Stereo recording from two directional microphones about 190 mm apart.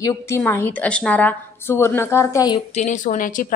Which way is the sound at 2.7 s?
40° left (ahead or behind).